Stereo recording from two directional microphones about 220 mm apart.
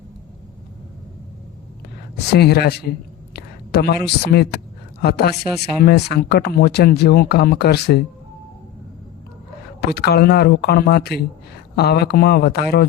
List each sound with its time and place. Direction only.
2.1 s a man's voice: 50° left (ahead or behind)
5.4 s speech: centre (ahead or behind)
5.8 s speech: 45° left (ahead or behind)
9.9 s speech: 45° left (ahead or behind)